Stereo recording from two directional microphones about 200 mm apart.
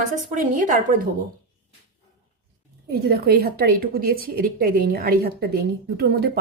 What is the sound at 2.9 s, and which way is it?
A woman's voice, 50° right (ahead or behind).